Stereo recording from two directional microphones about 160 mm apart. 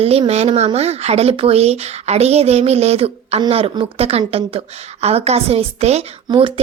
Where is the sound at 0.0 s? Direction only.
40° right (ahead or behind).